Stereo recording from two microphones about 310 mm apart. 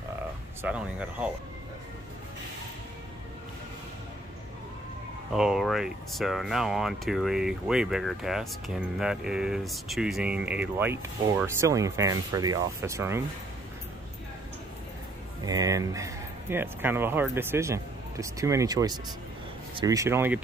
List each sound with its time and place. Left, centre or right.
0.6 s speech: centre
5.3 s speech: centre
15.4 s speech: centre